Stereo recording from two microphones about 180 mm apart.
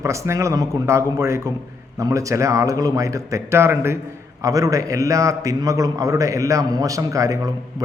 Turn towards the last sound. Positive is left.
turn(degrees=-20)  # may be behind; listen again after turning